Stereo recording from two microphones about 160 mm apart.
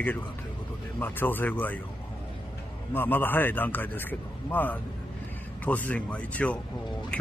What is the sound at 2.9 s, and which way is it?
Speech, 10° left (ahead or behind).